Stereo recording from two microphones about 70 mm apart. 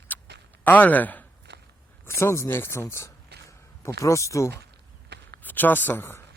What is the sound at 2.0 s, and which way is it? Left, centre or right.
Speech, left.